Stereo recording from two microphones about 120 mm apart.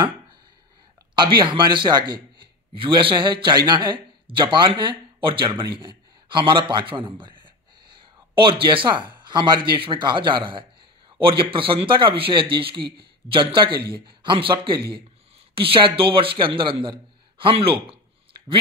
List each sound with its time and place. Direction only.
1.1 s a man's voice: 40° right (ahead or behind)